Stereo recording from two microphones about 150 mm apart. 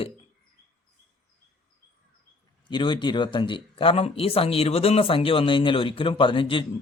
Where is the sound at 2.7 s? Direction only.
30° left (ahead or behind).